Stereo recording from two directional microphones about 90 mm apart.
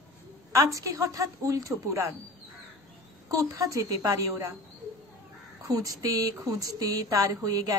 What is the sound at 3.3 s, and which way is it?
Speech, 40° right (ahead or behind).